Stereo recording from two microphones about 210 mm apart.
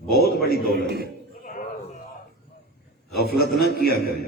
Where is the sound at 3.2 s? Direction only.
50° left (ahead or behind).